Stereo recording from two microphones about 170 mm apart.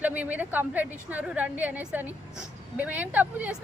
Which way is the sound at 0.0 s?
10° right (ahead or behind).